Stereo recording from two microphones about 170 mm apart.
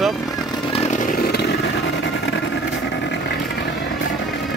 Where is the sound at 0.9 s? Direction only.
50° left (ahead or behind); by 2.4 s 90° left.